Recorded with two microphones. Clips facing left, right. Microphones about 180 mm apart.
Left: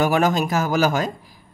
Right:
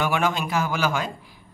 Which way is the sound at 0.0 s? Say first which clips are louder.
Left 5 dB; 40° left (ahead or behind).